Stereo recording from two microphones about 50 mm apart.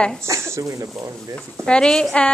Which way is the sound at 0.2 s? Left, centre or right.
Right.